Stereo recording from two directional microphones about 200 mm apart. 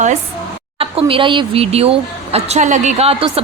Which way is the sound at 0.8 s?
30° right (ahead or behind).